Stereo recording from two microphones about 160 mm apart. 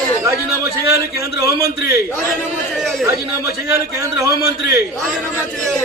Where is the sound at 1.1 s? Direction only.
20° right (ahead or behind).